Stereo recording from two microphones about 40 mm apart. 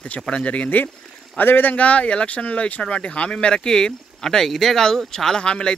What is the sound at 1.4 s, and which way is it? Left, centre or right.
Speech, left.